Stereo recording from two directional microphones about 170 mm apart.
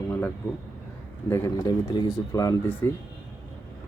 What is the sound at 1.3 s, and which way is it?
Speech, 20° left (ahead or behind).